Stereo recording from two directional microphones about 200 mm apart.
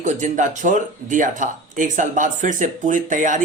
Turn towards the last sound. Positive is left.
turn(degrees=-40)  # may be behind; listen again after turning